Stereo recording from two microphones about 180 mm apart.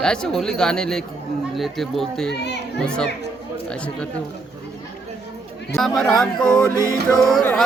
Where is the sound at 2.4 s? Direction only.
70° left (ahead or behind).